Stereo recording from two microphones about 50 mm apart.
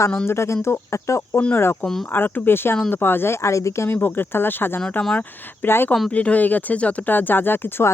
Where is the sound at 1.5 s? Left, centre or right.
Left.